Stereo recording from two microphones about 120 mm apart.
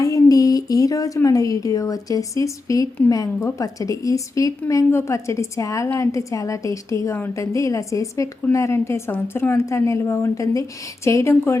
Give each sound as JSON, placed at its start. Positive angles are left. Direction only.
{"t": 0.0, "sound": "speech", "side_deg": 30}